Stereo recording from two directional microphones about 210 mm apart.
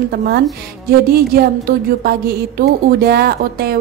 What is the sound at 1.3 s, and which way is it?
A woman's voice, 45° right (ahead or behind).